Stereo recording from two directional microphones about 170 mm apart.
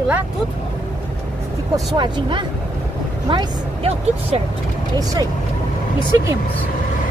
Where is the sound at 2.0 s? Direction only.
25° right (ahead or behind).